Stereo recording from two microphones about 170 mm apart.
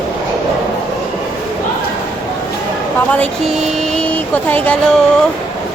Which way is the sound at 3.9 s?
10° left (ahead or behind).